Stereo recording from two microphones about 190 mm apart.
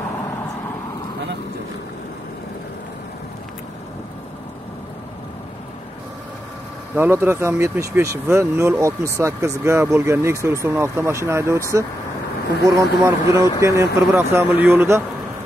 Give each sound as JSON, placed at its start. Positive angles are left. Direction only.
{"t": 7.0, "sound": "speech", "side_deg": -10}